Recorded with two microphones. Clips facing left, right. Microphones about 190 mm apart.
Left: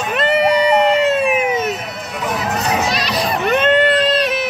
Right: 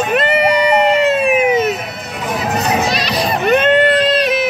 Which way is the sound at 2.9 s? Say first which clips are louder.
Right 2 dB; 70° right (ahead or behind).